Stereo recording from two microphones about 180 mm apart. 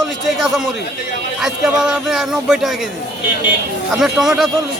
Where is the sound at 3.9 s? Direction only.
Centre (ahead or behind).